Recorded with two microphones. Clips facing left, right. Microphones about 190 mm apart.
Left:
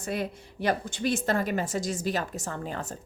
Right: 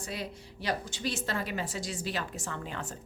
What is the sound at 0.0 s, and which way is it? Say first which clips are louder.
A woman's voice: left 7 dB; 50° left (ahead or behind).